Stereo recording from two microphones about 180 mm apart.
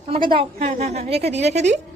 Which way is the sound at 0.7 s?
40° right (ahead or behind).